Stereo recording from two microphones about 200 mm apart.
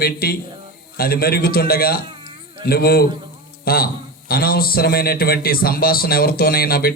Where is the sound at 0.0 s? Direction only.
50° left (ahead or behind).